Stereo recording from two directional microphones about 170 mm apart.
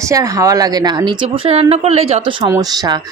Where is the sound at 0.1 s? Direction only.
20° right (ahead or behind); by 2.2 s 40° right (ahead or behind).